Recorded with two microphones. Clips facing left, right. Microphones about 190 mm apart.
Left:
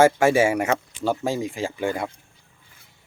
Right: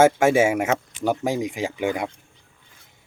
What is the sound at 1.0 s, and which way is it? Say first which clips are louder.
Speech: right 1 dB; 15° right (ahead or behind).